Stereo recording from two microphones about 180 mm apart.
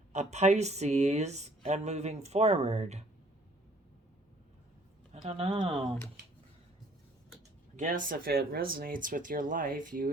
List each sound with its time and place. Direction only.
0.1 s speech: 40° right (ahead or behind)
5.1 s speech: 35° right (ahead or behind)
7.8 s speech: 50° right (ahead or behind)